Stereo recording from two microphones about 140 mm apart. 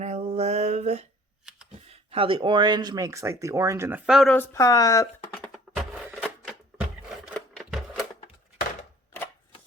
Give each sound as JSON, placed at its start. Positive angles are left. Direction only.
{"t": 0.0, "sound": "mantra", "side_deg": -50}
{"t": 1.5, "sound": "computer keyboard", "side_deg": -5}
{"t": 1.9, "sound": "speech", "side_deg": -45}
{"t": 4.1, "sound": "speech", "side_deg": 0}
{"t": 4.4, "sound": "speech", "side_deg": 25}
{"t": 5.5, "sound": "a sound", "side_deg": 0}
{"t": 7.3, "sound": "typewriter", "side_deg": 0}